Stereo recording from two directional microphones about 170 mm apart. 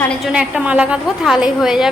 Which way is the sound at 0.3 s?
5° right (ahead or behind).